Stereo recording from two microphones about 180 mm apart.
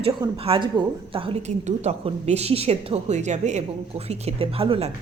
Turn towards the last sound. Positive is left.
turn(degrees=-30)  # may be behind; listen again after turning